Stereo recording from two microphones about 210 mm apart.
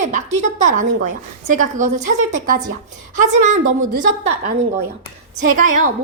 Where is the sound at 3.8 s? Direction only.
35° right (ahead or behind).